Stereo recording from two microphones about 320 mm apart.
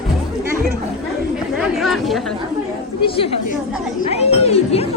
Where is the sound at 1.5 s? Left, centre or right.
Centre.